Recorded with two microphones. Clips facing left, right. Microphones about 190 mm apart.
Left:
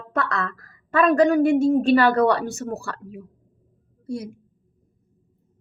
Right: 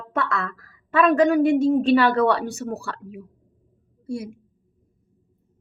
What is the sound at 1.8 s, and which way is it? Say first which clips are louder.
Speech: left 1 dB; 45° left (ahead or behind).